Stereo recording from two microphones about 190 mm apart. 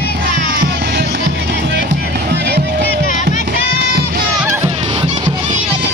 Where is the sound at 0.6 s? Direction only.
55° right (ahead or behind).